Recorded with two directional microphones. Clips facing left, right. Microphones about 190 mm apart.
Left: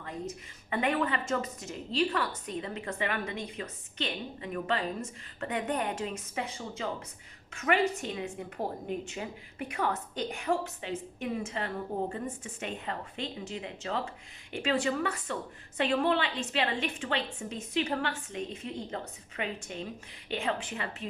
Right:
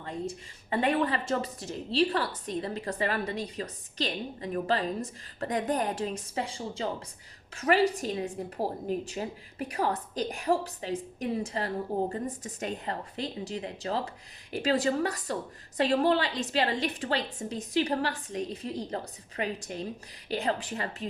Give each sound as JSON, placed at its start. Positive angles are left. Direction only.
{"t": 0.0, "sound": "a woman's voice", "side_deg": -30}